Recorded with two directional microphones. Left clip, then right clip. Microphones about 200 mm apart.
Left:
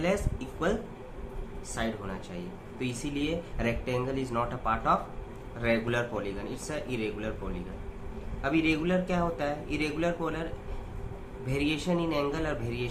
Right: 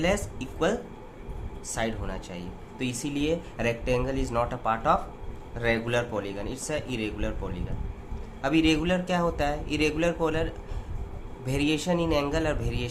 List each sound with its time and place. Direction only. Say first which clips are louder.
0.0 s speech: right 3 dB; 35° right (ahead or behind)
8.4 s speech: right 4 dB; 45° right (ahead or behind)
11.4 s speech: right 3 dB; 40° right (ahead or behind)